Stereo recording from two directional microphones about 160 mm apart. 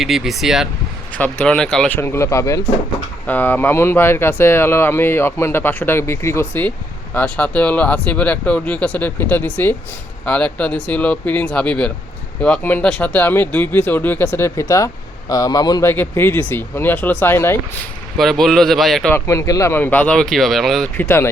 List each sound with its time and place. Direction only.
0.0 s speech: centre (ahead or behind)
1.1 s speech: 10° left (ahead or behind)
2.0 s speech: 15° left (ahead or behind)
18.2 s speech: centre (ahead or behind)
19.1 s speech: 20° left (ahead or behind)